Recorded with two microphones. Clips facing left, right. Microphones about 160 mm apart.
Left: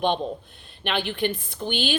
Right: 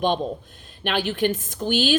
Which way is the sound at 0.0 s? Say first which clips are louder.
Right 1 dB; 45° right (ahead or behind).